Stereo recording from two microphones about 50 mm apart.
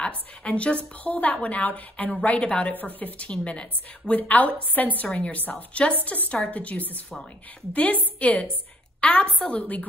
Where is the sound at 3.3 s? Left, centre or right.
Left.